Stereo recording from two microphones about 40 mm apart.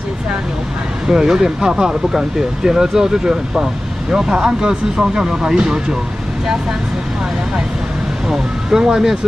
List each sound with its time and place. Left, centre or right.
1.0 s speech: centre
8.3 s speech: centre